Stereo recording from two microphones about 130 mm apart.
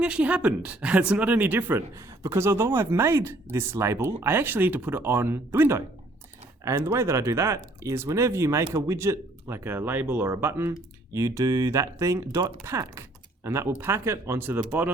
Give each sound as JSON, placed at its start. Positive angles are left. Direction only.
{"t": 0.0, "sound": "speech", "side_deg": -10}